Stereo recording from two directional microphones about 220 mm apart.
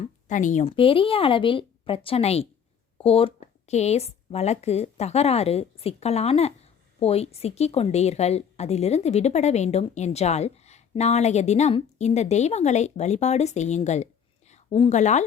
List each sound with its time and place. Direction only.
0.0 s a woman's voice: 35° left (ahead or behind)